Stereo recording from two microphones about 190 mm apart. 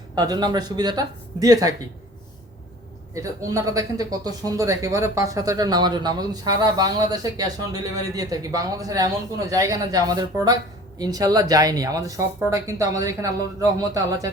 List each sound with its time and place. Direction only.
0.2 s speech: 20° right (ahead or behind)
3.2 s speech: 15° right (ahead or behind)